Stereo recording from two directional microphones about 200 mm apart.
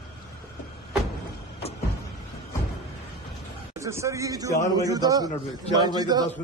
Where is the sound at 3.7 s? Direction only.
15° right (ahead or behind).